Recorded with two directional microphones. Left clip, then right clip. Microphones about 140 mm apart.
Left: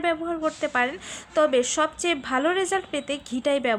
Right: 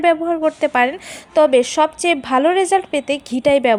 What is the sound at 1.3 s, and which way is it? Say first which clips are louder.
A woman's voice: right 8 dB; 30° right (ahead or behind).